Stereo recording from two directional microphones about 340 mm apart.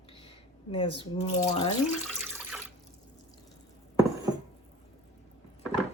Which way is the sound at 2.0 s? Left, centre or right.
Centre.